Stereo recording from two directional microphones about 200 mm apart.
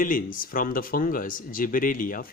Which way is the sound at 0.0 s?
45° left (ahead or behind).